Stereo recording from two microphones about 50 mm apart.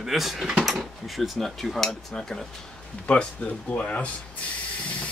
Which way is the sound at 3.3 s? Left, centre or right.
Left.